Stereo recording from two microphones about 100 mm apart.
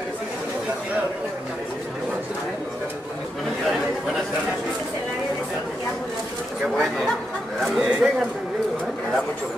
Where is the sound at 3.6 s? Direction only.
Centre (ahead or behind).